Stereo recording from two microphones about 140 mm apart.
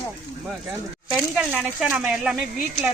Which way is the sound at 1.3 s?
10° right (ahead or behind).